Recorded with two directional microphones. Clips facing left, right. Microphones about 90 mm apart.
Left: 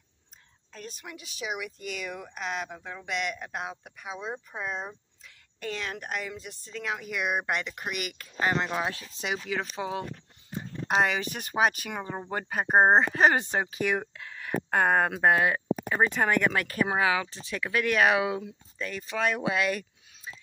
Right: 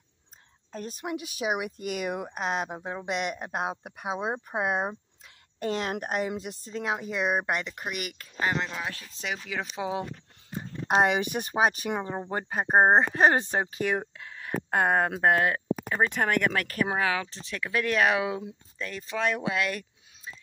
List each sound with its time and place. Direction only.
0.7 s speech: 45° right (ahead or behind); by 4.9 s 60° right (ahead or behind)
5.6 s a woman's voice: 40° right (ahead or behind)
7.8 s speech: 5° right (ahead or behind)
8.7 s speech: 20° left (ahead or behind)
9.5 s speech: 10° right (ahead or behind)
11.0 s speech: 20° right (ahead or behind)
12.3 s speech: 5° right (ahead or behind); by 19.8 s 15° left (ahead or behind)